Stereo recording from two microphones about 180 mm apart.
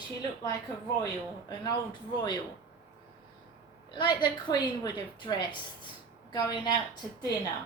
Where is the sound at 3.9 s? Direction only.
25° left (ahead or behind).